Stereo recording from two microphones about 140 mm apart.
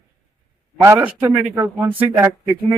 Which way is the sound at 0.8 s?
20° right (ahead or behind).